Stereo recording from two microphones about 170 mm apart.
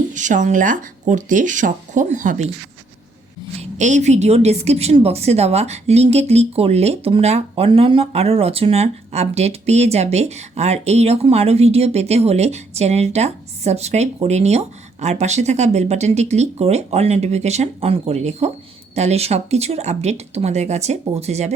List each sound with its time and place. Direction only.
0.1 s speech: 45° right (ahead or behind)
3.6 s a woman's voice: 45° right (ahead or behind)